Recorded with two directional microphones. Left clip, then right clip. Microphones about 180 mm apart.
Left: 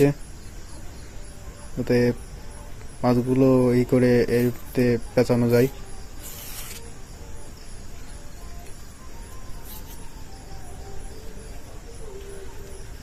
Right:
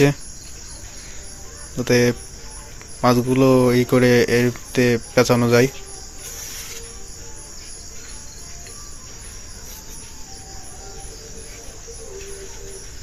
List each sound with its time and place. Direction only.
1.8 s speech: centre (ahead or behind)